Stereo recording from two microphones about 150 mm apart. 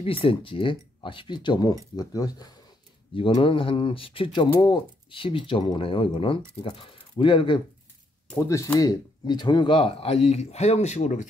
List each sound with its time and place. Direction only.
0.0 s speech: 35° left (ahead or behind)
3.2 s speech: 35° left (ahead or behind)
8.4 s speech: 20° left (ahead or behind); by 11.2 s 50° left (ahead or behind)